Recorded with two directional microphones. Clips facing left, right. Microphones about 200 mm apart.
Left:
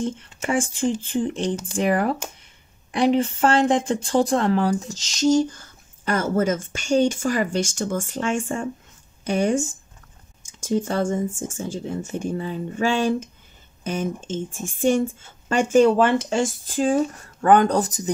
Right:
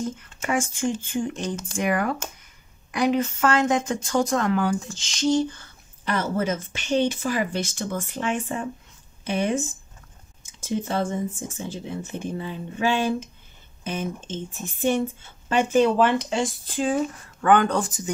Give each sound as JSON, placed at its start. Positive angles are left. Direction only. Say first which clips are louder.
{"t": 0.0, "sound": "speech", "louder": "left 3 dB", "side_deg": 30}